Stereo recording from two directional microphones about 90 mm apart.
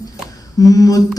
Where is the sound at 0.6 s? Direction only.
40° left (ahead or behind).